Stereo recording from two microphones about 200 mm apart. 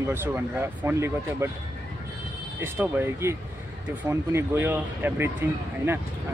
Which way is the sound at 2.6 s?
10° right (ahead or behind).